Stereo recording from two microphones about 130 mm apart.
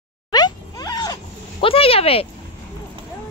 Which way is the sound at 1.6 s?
45° left (ahead or behind).